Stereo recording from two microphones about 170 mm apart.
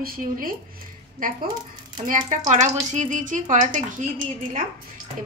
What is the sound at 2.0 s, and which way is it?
Speech, 50° right (ahead or behind).